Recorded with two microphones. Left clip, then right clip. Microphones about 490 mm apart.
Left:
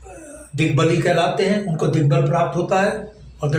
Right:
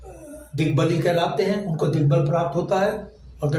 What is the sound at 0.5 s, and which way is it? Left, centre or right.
A man's voice, right.